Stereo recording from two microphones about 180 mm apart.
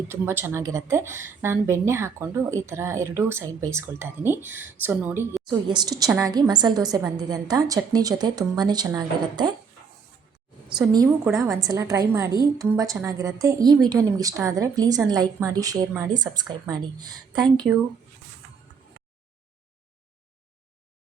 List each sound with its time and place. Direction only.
0.1 s a woman's voice: 15° right (ahead or behind)
5.5 s a woman's voice: 25° right (ahead or behind)
10.8 s a woman's voice: 20° right (ahead or behind)